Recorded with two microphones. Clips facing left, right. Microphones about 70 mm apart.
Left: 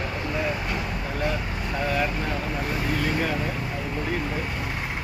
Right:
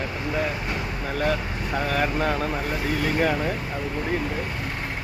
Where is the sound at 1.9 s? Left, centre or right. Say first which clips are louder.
Right 3 dB; right.